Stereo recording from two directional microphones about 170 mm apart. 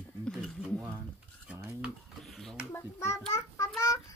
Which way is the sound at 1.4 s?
5° right (ahead or behind).